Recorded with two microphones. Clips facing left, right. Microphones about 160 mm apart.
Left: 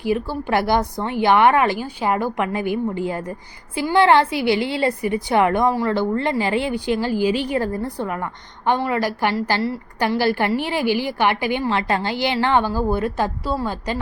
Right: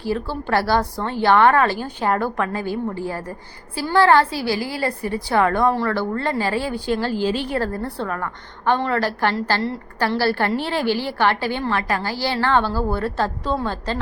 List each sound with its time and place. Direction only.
0.0 s a woman's voice: 15° left (ahead or behind)